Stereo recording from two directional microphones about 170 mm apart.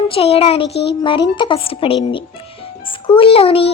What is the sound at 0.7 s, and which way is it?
Speech, 80° left.